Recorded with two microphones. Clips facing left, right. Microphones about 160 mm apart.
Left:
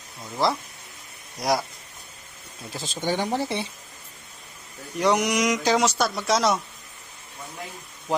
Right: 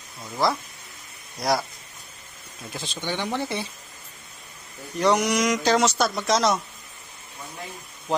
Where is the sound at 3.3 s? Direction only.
25° left (ahead or behind).